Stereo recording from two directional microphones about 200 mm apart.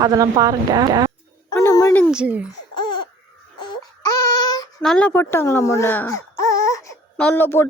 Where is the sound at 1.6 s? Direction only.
15° left (ahead or behind).